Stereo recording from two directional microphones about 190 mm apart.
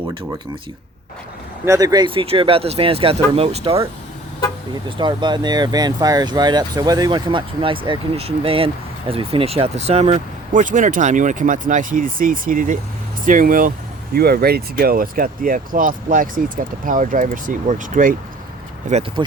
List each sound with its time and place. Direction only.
1.6 s speech: 15° right (ahead or behind)
4.9 s speech: 25° right (ahead or behind)